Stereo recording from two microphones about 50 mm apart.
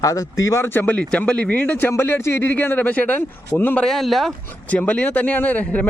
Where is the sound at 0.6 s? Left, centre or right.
Left.